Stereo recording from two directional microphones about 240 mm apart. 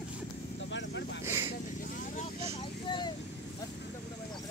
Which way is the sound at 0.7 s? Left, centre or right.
Left.